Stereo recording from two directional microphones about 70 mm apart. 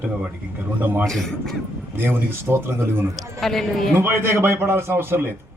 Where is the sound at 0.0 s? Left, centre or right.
Right.